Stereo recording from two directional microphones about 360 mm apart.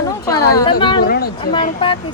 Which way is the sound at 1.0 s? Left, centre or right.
Left.